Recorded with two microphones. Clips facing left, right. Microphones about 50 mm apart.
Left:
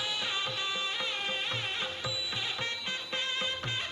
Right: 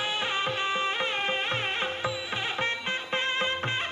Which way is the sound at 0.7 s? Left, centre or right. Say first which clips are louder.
Right 6 dB; right.